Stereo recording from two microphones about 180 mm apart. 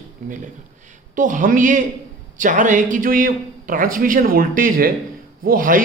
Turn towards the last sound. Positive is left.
turn(degrees=-50)  # may be behind; listen again after turning